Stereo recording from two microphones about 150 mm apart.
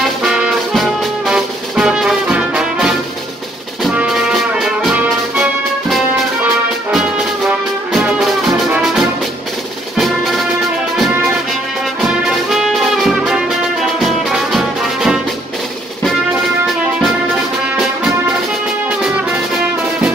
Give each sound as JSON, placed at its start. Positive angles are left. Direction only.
{"t": 0.2, "sound": "brass instrument", "side_deg": -5}
{"t": 3.8, "sound": "music", "side_deg": -5}
{"t": 7.4, "sound": "music", "side_deg": -5}
{"t": 9.9, "sound": "music", "side_deg": 0}
{"t": 12.0, "sound": "brass instrument", "side_deg": 0}
{"t": 14.0, "sound": "music", "side_deg": 0}